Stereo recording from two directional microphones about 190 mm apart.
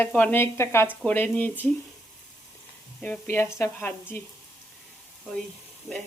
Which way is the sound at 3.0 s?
10° left (ahead or behind).